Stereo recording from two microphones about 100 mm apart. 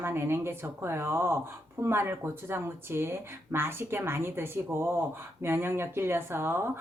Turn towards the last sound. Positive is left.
turn(degrees=-25)  # may be behind; listen again after turning